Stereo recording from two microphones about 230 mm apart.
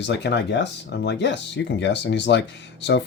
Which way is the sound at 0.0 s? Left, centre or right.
Left.